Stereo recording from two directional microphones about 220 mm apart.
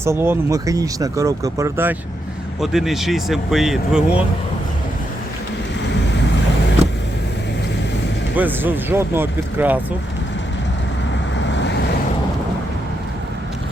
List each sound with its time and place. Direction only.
0.0 s speech: 10° right (ahead or behind)
6.8 s vehicle: 30° right (ahead or behind)
8.4 s speech: 10° right (ahead or behind)
11.3 s vehicle: 55° left (ahead or behind)